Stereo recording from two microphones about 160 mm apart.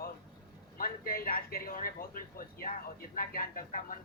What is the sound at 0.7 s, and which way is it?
Speech, 65° left (ahead or behind).